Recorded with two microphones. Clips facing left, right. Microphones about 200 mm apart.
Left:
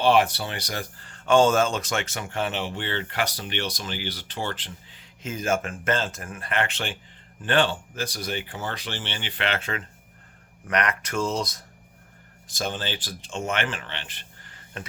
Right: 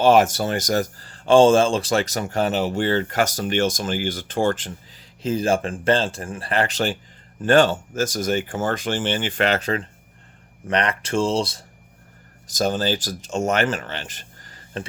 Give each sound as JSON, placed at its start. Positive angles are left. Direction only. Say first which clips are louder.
{"t": 0.0, "sound": "speech", "louder": "right 5 dB", "side_deg": -45}
{"t": 12.5, "sound": "speech", "louder": "right 9 dB", "side_deg": -40}